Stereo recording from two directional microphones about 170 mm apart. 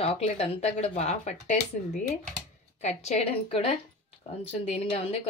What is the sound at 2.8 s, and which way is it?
A woman's voice, 40° left (ahead or behind).